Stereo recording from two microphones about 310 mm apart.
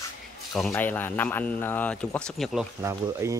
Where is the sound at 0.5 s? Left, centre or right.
Centre.